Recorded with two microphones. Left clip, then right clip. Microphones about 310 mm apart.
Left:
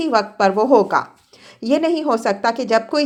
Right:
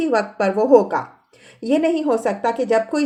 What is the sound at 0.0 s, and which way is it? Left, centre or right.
A woman's voice, centre.